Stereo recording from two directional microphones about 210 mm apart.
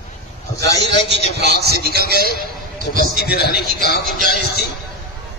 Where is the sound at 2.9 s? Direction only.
50° left (ahead or behind).